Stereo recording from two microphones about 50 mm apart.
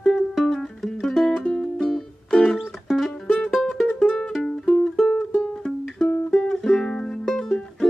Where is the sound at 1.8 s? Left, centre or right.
Centre.